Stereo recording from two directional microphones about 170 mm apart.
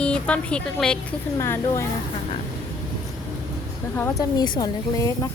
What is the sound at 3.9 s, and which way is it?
Speech, 15° left (ahead or behind).